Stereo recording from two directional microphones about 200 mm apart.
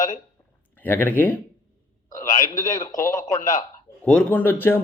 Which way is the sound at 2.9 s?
40° left (ahead or behind).